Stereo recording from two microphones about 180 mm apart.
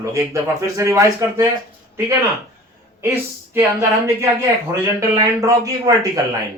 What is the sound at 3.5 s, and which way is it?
Speech, 10° right (ahead or behind).